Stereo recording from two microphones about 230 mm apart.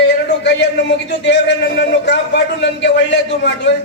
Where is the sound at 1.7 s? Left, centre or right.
Left.